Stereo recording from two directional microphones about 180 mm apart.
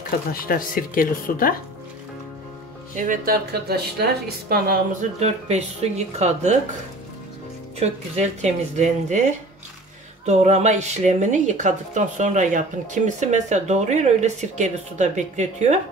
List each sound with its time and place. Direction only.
0.3 s speech: 50° left (ahead or behind)
3.0 s speech: 50° right (ahead or behind)
5.2 s speech: 40° right (ahead or behind)
7.8 s speech: 40° right (ahead or behind)
10.2 s speech: 40° right (ahead or behind)